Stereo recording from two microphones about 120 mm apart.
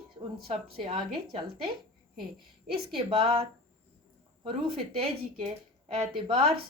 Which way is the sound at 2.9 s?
45° right (ahead or behind).